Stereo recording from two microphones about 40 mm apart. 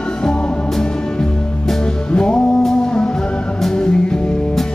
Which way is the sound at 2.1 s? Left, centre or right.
Left.